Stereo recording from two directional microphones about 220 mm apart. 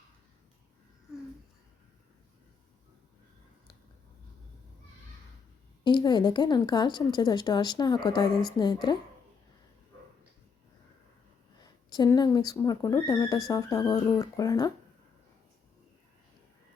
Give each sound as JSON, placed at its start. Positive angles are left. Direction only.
{"t": 5.8, "sound": "speech", "side_deg": 20}
{"t": 11.6, "sound": "speech", "side_deg": 20}